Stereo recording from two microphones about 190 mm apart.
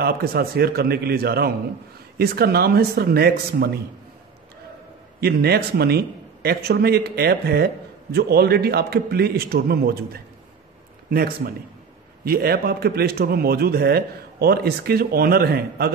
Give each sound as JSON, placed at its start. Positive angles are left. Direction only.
{"t": 0.0, "sound": "a man's voice", "side_deg": -55}
{"t": 5.2, "sound": "a man's voice", "side_deg": -55}